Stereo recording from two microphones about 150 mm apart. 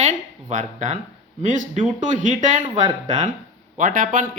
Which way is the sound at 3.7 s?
65° right (ahead or behind).